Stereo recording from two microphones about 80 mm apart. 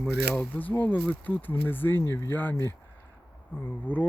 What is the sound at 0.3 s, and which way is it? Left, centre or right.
Speech, left.